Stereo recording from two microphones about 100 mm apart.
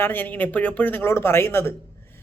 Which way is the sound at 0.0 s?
20° left (ahead or behind).